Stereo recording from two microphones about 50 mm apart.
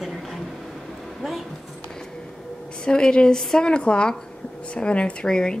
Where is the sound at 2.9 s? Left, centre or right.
Centre.